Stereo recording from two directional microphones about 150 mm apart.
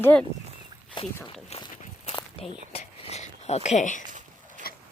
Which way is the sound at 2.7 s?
40° left (ahead or behind).